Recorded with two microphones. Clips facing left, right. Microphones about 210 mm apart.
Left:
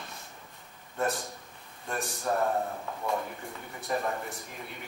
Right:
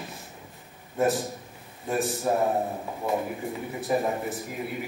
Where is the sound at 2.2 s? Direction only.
15° right (ahead or behind).